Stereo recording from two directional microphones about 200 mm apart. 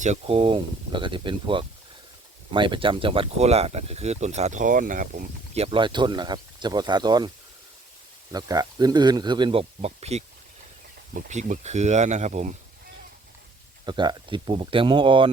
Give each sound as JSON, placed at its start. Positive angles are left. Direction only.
{"t": 0.0, "sound": "speech", "side_deg": -30}
{"t": 8.3, "sound": "speech", "side_deg": -20}
{"t": 13.8, "sound": "speech", "side_deg": -25}